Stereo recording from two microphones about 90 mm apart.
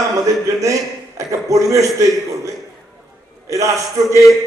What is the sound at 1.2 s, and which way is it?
A man's voice, 35° right (ahead or behind).